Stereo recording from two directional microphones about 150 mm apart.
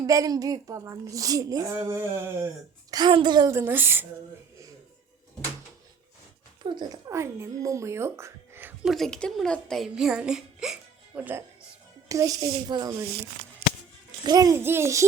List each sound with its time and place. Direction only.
0.0 s a woman's voice: 25° right (ahead or behind)
2.9 s a woman's voice: 30° right (ahead or behind)
3.5 s a woman's voice: 15° right (ahead or behind)
6.6 s a woman's voice: 30° right (ahead or behind)
8.8 s a child's voice: centre (ahead or behind); by 13.1 s 20° right (ahead or behind)
14.3 s a woman's voice: 25° right (ahead or behind)